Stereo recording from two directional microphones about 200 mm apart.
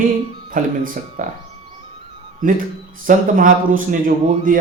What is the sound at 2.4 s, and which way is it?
Speech, 45° right (ahead or behind).